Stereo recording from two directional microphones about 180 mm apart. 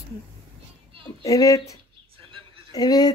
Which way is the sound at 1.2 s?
20° left (ahead or behind).